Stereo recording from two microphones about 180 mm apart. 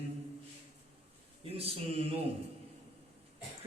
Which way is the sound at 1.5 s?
35° right (ahead or behind).